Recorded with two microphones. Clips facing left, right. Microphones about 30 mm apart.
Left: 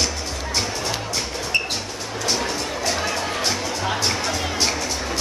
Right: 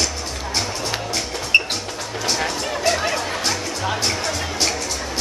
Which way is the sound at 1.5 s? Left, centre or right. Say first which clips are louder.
Right 6 dB; right.